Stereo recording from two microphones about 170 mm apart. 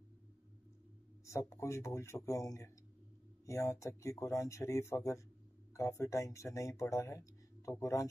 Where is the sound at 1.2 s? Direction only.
15° left (ahead or behind).